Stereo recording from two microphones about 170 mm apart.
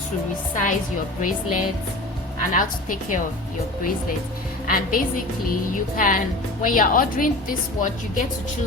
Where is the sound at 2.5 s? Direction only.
50° left (ahead or behind).